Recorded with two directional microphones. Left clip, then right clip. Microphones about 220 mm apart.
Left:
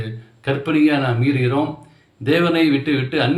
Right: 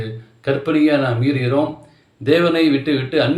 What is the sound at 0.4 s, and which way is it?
A man's voice, 10° left (ahead or behind).